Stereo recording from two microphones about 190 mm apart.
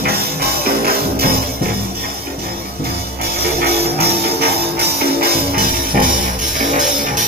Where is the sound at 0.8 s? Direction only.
55° right (ahead or behind).